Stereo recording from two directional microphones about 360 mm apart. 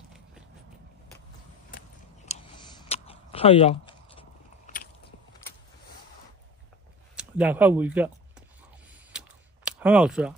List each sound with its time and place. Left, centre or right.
2.2 s typing: centre
7.2 s a sound: centre
9.7 s speech: centre